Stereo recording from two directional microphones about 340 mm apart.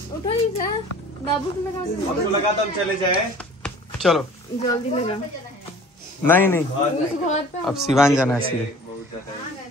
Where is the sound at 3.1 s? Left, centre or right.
Centre.